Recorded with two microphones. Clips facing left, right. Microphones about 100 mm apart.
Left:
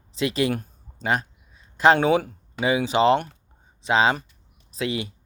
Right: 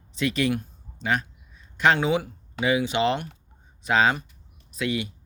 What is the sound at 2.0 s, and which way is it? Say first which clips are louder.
Speech: left 4 dB; 45° left (ahead or behind).